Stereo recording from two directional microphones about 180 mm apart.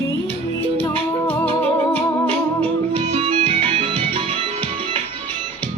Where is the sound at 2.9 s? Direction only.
30° right (ahead or behind).